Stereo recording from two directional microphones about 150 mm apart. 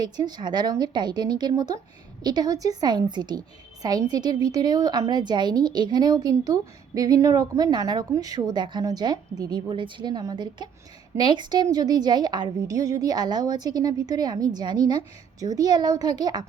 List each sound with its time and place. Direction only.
0.0 s a woman's voice: 30° right (ahead or behind)